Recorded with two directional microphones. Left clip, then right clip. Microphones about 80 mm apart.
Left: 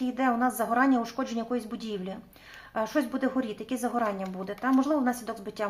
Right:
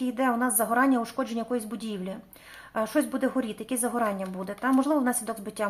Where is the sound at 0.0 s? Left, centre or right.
Right.